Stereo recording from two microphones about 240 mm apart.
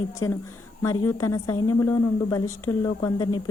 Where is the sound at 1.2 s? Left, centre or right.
Centre.